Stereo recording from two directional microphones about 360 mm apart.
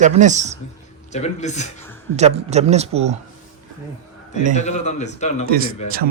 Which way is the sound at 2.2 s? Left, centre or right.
Centre.